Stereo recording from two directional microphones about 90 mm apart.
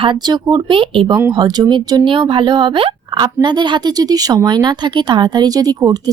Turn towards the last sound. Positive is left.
turn(degrees=-45)  # may be behind; listen again after turning